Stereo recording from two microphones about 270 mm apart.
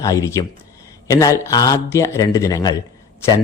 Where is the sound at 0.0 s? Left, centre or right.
Centre.